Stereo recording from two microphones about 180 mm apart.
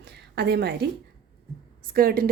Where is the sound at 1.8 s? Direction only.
55° right (ahead or behind).